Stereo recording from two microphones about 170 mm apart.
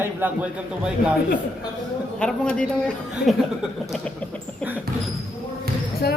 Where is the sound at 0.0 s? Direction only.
10° right (ahead or behind).